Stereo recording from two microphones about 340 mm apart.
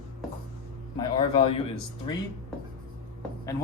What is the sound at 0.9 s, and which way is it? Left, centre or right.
Speech, centre.